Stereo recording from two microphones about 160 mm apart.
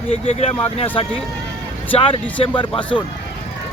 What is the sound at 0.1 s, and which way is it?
Speech, 40° left (ahead or behind).